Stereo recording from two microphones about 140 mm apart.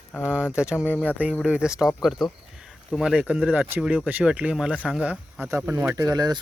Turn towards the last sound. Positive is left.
turn(degrees=-30)  # may be behind; listen again after turning